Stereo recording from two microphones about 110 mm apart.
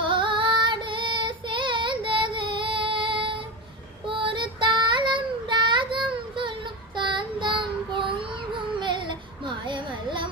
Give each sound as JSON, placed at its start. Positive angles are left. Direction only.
{"t": 0.0, "sound": "child singing", "side_deg": -50}